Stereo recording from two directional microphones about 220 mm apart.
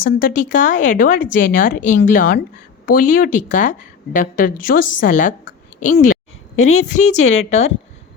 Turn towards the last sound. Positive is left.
turn(degrees=30)  # may be behind; listen again after turning